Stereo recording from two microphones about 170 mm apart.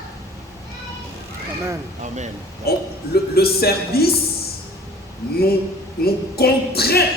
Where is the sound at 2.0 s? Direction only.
45° right (ahead or behind).